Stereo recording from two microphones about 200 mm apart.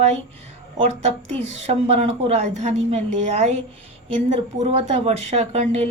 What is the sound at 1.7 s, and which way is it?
A woman's voice, 30° right (ahead or behind).